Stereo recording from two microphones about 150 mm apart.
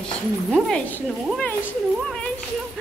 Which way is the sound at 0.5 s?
5° left (ahead or behind).